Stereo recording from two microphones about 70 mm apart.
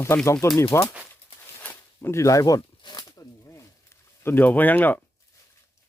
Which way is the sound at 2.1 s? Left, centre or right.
Left.